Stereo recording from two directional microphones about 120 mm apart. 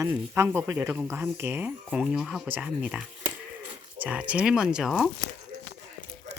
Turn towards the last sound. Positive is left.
turn(degrees=0)  # may be behind; listen again after turning